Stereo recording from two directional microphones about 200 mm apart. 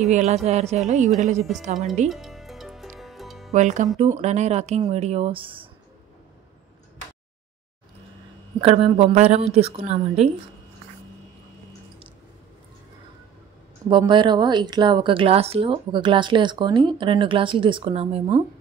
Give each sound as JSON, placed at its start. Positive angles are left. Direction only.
{"t": 0.1, "sound": "a woman's voice", "side_deg": -35}
{"t": 2.0, "sound": "music", "side_deg": 0}
{"t": 3.5, "sound": "a woman's voice", "side_deg": -35}
{"t": 8.5, "sound": "a woman's voice", "side_deg": -30}
{"t": 13.8, "sound": "a woman's voice", "side_deg": -25}